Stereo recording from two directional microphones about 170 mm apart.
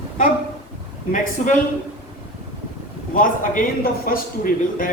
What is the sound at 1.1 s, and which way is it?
Speech, 50° left (ahead or behind).